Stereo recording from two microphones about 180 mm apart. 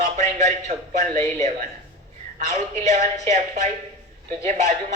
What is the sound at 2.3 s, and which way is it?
Speech, 40° right (ahead or behind).